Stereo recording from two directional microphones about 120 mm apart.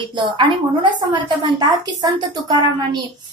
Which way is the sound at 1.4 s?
40° right (ahead or behind).